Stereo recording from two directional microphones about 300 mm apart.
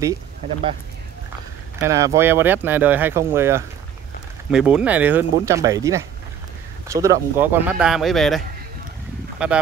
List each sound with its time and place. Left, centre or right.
1.8 s speech: centre
9.4 s speech: centre